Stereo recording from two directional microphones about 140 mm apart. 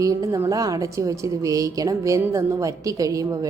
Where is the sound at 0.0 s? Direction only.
25° right (ahead or behind).